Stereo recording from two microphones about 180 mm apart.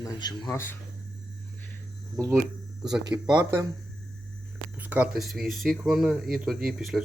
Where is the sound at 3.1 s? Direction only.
20° right (ahead or behind).